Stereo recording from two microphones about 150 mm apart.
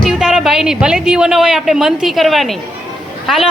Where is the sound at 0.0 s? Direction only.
5° right (ahead or behind).